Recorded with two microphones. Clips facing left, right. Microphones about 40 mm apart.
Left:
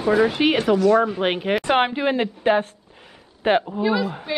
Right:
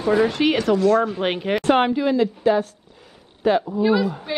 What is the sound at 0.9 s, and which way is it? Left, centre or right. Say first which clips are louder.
Speech: left 1 dB; centre.